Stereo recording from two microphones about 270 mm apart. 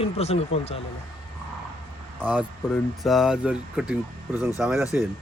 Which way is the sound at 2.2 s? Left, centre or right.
Centre.